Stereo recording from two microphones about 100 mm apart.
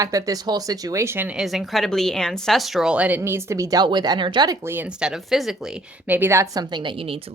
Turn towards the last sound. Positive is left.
turn(degrees=-65)  # may be behind; listen again after turning